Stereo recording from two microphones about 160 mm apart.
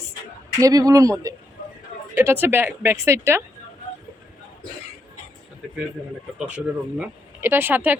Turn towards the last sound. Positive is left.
turn(degrees=-10)  # may be behind; listen again after turning